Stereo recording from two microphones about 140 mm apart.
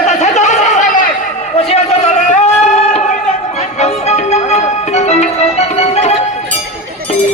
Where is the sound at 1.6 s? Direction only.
50° left (ahead or behind).